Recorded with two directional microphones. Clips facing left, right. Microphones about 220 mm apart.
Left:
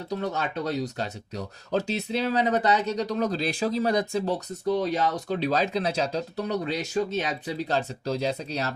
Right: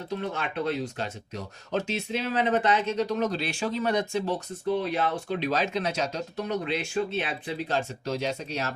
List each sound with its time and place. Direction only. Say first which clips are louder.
0.1 s speech: left 3 dB; 40° left (ahead or behind)